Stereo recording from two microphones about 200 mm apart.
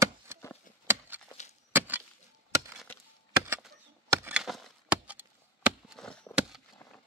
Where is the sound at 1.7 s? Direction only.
10° right (ahead or behind).